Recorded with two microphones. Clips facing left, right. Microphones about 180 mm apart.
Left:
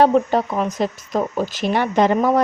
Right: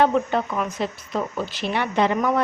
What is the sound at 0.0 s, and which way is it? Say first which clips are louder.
Speech: left 4 dB; 35° left (ahead or behind).